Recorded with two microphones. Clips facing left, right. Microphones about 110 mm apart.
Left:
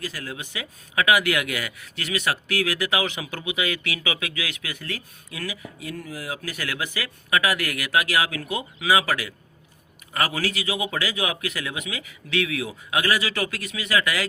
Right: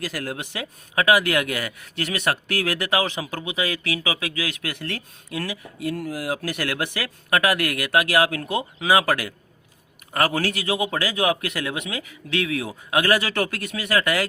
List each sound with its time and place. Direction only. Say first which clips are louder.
0.0 s speech: right 4 dB; 70° right (ahead or behind)
0.9 s a man's voice: right 2 dB; 40° right (ahead or behind)
4.6 s speech: right 3 dB; 70° right (ahead or behind)
5.3 s a man's voice: right 4 dB; 50° right (ahead or behind)
7.3 s a man's voice: right 3 dB; 45° right (ahead or behind)